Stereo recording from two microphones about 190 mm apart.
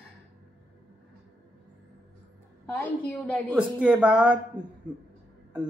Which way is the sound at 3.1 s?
5° left (ahead or behind).